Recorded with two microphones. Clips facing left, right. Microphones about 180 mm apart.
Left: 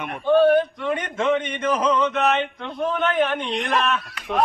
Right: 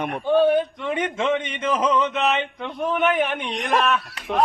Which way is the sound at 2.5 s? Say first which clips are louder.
Even; 15° right (ahead or behind).